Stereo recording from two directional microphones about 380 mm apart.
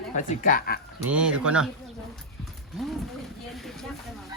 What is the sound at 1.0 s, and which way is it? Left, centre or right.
Speech, centre.